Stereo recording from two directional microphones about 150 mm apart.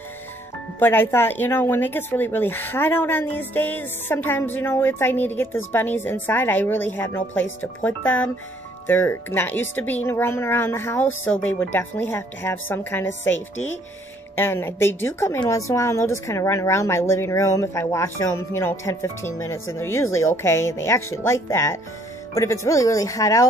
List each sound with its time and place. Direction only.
0.7 s a woman's voice: 15° left (ahead or behind)